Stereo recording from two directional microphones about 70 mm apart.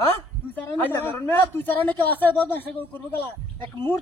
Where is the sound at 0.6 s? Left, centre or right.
Left.